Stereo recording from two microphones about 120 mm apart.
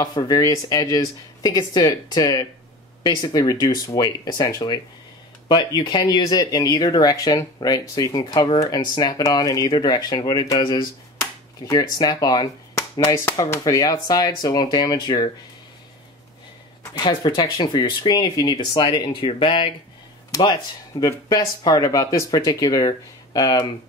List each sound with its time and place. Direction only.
0.0 s speech: 30° left (ahead or behind)
8.3 s speech: 45° left (ahead or behind)
8.5 s speech: 35° left (ahead or behind)
11.1 s speech: 25° left (ahead or behind)
16.9 s speech: 40° left (ahead or behind)
21.0 s speech: 35° left (ahead or behind)